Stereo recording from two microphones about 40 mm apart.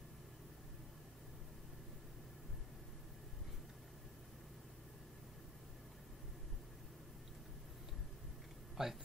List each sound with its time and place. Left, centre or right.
8.8 s speech: centre